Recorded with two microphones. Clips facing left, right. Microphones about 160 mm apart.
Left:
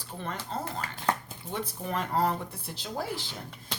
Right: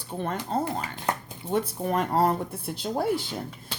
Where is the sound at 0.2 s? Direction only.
50° right (ahead or behind).